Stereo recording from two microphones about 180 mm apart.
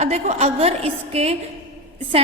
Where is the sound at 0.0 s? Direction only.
40° right (ahead or behind).